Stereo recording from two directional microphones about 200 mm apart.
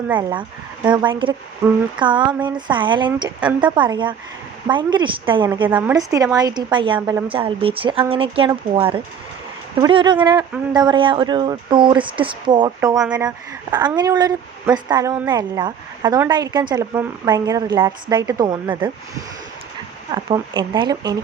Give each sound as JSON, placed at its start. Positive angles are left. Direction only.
{"t": 0.2, "sound": "speech", "side_deg": -20}
{"t": 1.6, "sound": "a sound", "side_deg": -15}
{"t": 2.0, "sound": "speech", "side_deg": -25}
{"t": 5.6, "sound": "speech", "side_deg": -15}